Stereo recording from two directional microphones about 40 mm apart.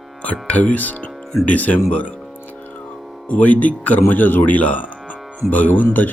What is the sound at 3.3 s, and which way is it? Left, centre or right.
Speech, left.